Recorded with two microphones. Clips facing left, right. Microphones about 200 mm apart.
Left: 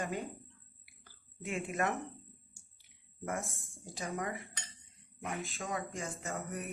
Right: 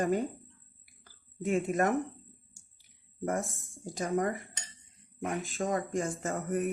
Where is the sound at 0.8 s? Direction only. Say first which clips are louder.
Right 1 dB; 40° right (ahead or behind).